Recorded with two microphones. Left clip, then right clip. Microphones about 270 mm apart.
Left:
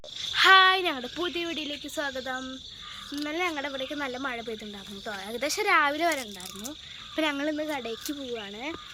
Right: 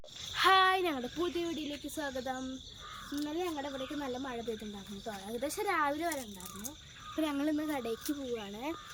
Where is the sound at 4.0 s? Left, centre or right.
Centre.